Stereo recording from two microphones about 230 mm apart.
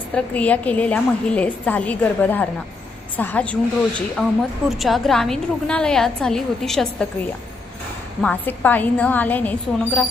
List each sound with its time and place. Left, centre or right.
0.1 s a woman's voice: centre
8.2 s a woman's voice: centre